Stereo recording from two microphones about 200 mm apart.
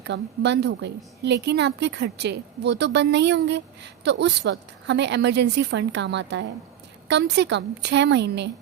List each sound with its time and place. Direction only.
0.1 s a woman's voice: 60° right (ahead or behind)